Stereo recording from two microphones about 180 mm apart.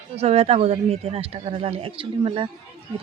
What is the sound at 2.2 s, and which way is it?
Speech, 30° right (ahead or behind).